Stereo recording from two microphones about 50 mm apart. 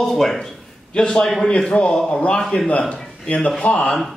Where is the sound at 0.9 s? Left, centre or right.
Centre.